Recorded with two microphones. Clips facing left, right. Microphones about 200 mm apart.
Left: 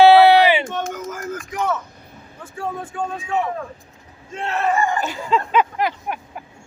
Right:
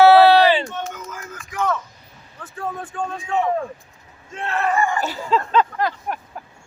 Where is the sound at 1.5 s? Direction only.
10° left (ahead or behind).